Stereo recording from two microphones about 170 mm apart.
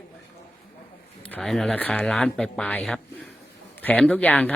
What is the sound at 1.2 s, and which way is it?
Speech, 5° left (ahead or behind).